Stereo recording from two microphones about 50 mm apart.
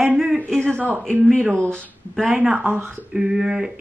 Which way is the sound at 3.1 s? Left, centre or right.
Centre.